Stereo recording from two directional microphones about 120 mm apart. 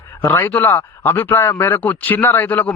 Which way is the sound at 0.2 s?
15° left (ahead or behind).